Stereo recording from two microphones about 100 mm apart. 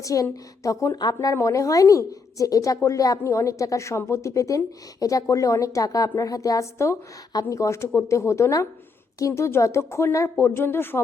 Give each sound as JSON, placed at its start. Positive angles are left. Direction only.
{"t": 0.0, "sound": "a woman's voice", "side_deg": 35}